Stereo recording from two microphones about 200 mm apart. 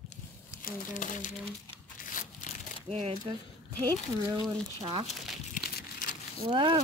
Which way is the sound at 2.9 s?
25° right (ahead or behind).